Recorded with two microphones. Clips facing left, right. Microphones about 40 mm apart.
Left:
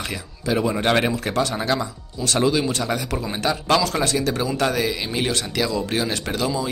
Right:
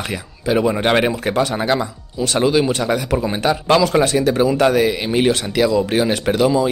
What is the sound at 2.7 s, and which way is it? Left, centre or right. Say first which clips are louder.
Speech: right 6 dB; centre.